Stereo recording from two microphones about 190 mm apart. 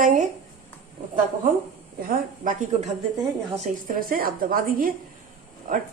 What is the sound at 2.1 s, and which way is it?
A woman's voice, 45° right (ahead or behind).